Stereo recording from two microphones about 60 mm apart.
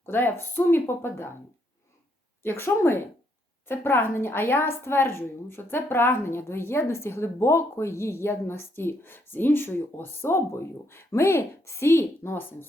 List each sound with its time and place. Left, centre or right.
0.0 s a woman's voice: left
2.4 s a woman's voice: left